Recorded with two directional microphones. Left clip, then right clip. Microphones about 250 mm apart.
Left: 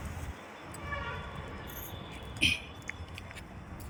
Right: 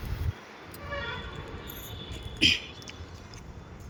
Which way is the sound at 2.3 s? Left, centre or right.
Centre.